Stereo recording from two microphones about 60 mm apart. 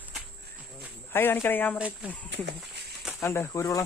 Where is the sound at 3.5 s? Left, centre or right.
Left.